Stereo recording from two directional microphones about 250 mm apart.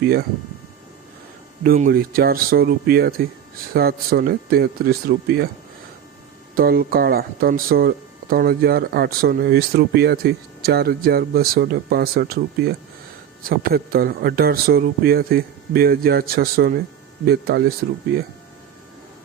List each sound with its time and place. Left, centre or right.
0.0 s speech: right
1.6 s speech: right
6.6 s speech: right